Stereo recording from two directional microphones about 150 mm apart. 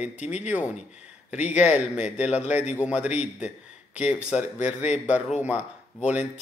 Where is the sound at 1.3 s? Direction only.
10° right (ahead or behind).